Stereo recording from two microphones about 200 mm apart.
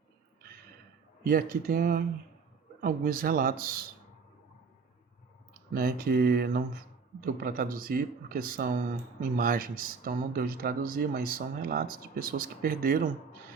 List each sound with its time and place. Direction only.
1.2 s speech: 45° right (ahead or behind)
5.7 s speech: 50° right (ahead or behind)